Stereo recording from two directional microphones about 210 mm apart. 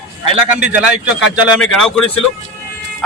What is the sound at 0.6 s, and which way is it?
A man's voice, 5° right (ahead or behind).